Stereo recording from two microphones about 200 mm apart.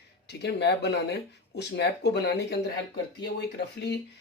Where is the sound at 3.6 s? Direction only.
55° left (ahead or behind).